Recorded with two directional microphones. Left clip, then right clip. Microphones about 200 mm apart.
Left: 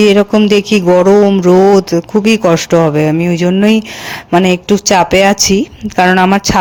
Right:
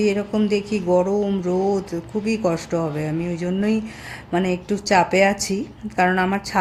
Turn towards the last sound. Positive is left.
turn(degrees=40)  # may be behind; listen again after turning